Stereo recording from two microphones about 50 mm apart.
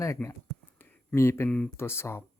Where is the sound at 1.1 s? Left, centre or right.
Left.